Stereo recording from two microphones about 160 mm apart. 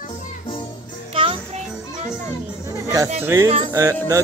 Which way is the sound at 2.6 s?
15° right (ahead or behind).